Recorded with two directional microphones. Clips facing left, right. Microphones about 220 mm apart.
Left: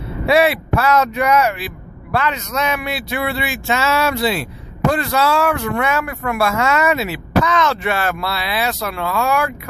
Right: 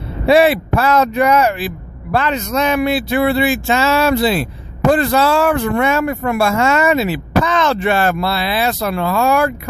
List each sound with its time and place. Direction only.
0.3 s speech: 30° right (ahead or behind)